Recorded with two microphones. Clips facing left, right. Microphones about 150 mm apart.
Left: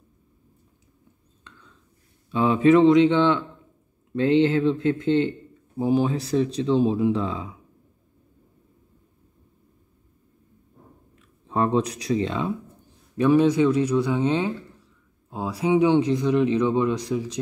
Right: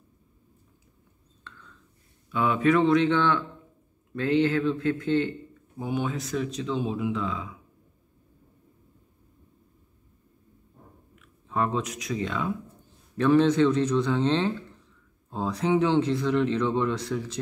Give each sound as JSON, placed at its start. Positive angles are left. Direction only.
{"t": 2.3, "sound": "speech", "side_deg": 25}
{"t": 11.1, "sound": "speech", "side_deg": 30}
{"t": 13.2, "sound": "speech", "side_deg": 10}